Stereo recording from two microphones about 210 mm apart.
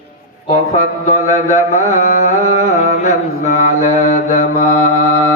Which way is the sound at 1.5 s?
35° left (ahead or behind).